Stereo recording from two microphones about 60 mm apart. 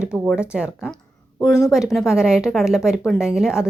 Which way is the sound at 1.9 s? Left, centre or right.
Centre.